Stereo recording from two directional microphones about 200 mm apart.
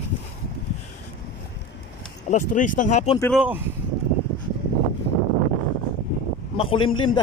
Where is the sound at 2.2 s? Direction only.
40° left (ahead or behind).